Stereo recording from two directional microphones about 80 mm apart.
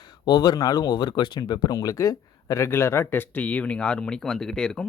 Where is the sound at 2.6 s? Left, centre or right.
Left; by 4.8 s centre.